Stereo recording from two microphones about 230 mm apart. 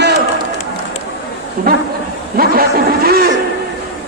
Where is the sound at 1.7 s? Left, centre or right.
Right.